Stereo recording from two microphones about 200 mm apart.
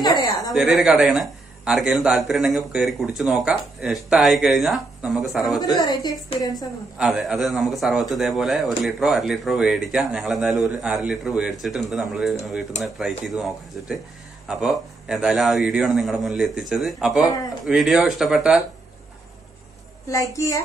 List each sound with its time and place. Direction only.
0.0 s a sound: 20° left (ahead or behind)
0.5 s speech: centre (ahead or behind)
5.8 s a woman's voice: 20° left (ahead or behind)
6.5 s speech: centre (ahead or behind)
20.1 s a woman's voice: 15° left (ahead or behind)